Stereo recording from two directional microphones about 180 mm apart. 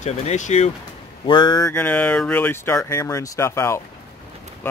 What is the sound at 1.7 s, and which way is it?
Speech, 10° left (ahead or behind).